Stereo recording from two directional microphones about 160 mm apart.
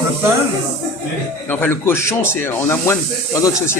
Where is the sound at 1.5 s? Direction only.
15° left (ahead or behind).